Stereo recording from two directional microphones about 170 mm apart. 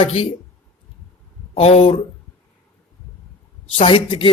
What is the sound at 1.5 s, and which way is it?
Speech, 35° left (ahead or behind).